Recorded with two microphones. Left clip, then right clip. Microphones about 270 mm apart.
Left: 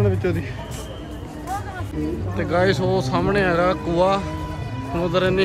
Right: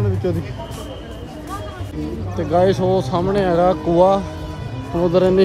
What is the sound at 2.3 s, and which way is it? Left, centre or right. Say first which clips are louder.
Speech: right 4 dB; centre.